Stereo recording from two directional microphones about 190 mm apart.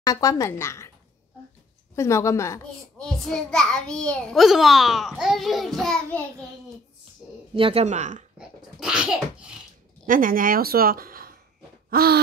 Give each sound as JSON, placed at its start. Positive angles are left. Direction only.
{"t": 0.0, "sound": "speech", "side_deg": 20}
{"t": 2.0, "sound": "a woman's voice", "side_deg": 15}
{"t": 3.0, "sound": "a child's voice", "side_deg": 5}
{"t": 7.5, "sound": "speech", "side_deg": -30}
{"t": 8.4, "sound": "a child's voice", "side_deg": -5}
{"t": 10.0, "sound": "speech", "side_deg": -45}
{"t": 11.9, "sound": "gasp", "side_deg": -55}